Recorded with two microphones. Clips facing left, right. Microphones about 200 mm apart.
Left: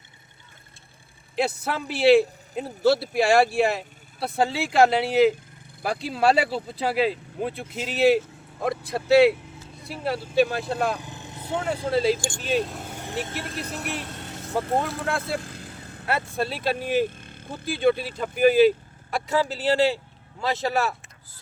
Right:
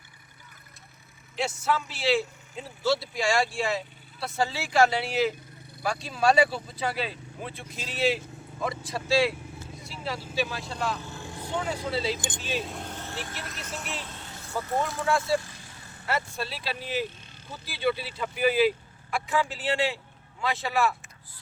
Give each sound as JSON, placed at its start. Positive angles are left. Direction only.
{"t": 1.5, "sound": "speech", "side_deg": 60}
{"t": 11.0, "sound": "vehicle", "side_deg": 20}
{"t": 11.6, "sound": "speech", "side_deg": 55}
{"t": 12.5, "sound": "speech", "side_deg": 0}
{"t": 13.8, "sound": "vehicle", "side_deg": 65}
{"t": 14.9, "sound": "speech", "side_deg": 60}